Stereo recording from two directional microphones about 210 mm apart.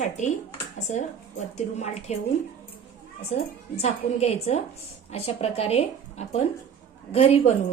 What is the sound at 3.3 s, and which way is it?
A woman's voice, 30° left (ahead or behind).